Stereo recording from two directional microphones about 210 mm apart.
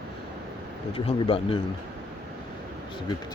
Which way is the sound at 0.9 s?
25° left (ahead or behind).